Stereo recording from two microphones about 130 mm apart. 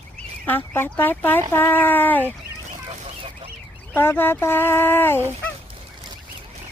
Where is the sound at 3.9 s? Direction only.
15° left (ahead or behind).